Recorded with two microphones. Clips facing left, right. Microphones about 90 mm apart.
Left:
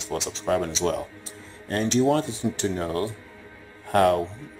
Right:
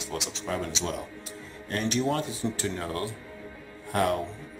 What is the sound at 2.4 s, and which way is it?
Speech, 20° left (ahead or behind).